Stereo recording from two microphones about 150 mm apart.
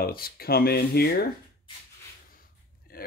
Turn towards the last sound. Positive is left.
turn(degrees=80)